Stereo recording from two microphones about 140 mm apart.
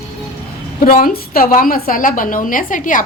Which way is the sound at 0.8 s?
90° left.